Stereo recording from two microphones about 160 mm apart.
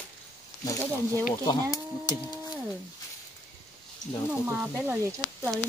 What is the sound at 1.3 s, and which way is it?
Speech, 25° left (ahead or behind).